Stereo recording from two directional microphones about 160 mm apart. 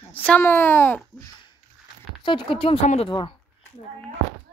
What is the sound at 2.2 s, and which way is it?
Speech, 30° left (ahead or behind).